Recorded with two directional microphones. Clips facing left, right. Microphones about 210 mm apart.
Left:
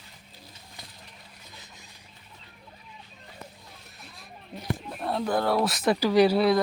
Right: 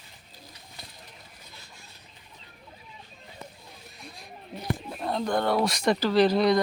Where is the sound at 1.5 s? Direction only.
20° left (ahead or behind).